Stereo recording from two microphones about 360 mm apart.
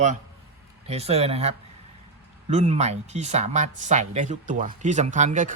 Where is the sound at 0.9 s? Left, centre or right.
Centre.